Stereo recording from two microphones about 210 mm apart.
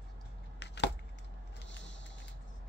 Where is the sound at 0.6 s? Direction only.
55° left (ahead or behind).